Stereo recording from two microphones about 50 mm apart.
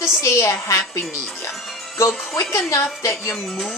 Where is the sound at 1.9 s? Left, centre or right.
Left.